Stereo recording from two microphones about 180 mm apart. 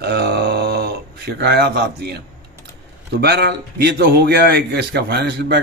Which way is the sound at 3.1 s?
65° right (ahead or behind).